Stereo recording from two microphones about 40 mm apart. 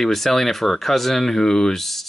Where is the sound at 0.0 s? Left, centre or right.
Centre.